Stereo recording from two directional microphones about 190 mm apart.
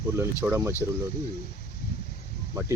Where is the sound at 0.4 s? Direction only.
10° right (ahead or behind).